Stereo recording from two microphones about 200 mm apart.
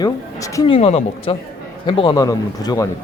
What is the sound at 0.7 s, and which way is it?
A woman's voice, 30° left (ahead or behind).